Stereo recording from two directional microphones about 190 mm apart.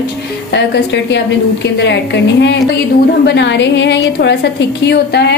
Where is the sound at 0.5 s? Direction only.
65° left (ahead or behind).